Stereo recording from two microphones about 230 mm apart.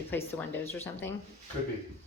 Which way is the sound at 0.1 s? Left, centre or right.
Centre.